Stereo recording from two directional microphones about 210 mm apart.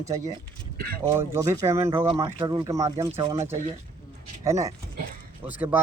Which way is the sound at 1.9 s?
25° right (ahead or behind).